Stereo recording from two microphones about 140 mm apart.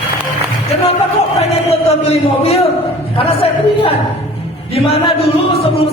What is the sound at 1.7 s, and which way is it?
Speech, 50° left (ahead or behind).